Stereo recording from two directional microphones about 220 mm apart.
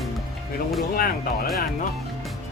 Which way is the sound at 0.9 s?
40° left (ahead or behind).